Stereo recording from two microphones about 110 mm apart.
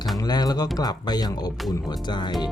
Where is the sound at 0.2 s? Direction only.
40° left (ahead or behind).